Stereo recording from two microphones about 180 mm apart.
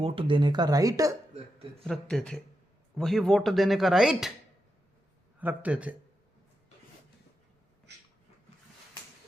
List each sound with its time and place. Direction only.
0.0 s speech: 30° right (ahead or behind)
1.8 s speech: 5° left (ahead or behind)
5.4 s a man's voice: 10° right (ahead or behind)